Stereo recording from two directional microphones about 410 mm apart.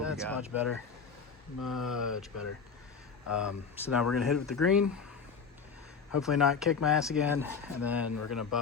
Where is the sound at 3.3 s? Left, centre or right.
Centre.